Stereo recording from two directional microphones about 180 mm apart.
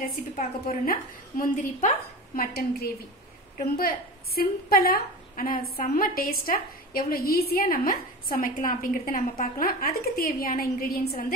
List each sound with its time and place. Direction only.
0.0 s a woman's voice: 50° left (ahead or behind)